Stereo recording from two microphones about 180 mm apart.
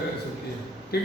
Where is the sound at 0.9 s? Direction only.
60° left (ahead or behind).